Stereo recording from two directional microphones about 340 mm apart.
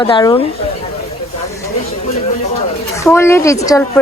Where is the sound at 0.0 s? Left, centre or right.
Centre.